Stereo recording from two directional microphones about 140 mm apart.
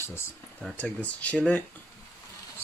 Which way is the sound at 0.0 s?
15° left (ahead or behind).